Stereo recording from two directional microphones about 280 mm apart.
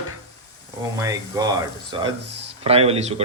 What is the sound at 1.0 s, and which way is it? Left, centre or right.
A man's voice, centre.